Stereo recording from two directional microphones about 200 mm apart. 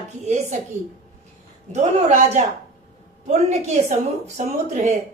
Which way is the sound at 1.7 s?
35° right (ahead or behind).